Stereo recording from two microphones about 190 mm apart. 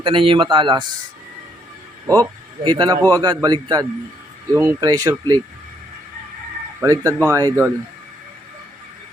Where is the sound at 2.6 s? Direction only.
20° right (ahead or behind).